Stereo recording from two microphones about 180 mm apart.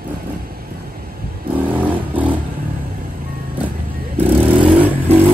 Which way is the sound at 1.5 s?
10° right (ahead or behind).